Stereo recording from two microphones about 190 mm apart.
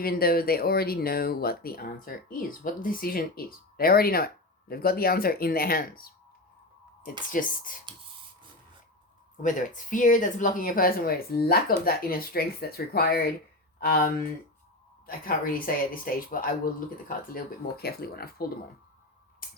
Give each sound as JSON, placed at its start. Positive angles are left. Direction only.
{"t": 0.0, "sound": "speech", "side_deg": 50}
{"t": 7.3, "sound": "speech", "side_deg": 45}
{"t": 9.4, "sound": "speech", "side_deg": 45}
{"t": 19.4, "sound": "a sound", "side_deg": 50}